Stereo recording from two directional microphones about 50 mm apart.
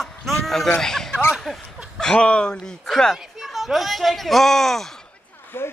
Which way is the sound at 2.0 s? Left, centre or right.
Centre.